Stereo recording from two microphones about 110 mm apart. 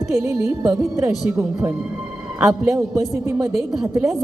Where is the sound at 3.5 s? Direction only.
5° right (ahead or behind).